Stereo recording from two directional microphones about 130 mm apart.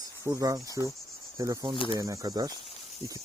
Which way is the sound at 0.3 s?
30° right (ahead or behind).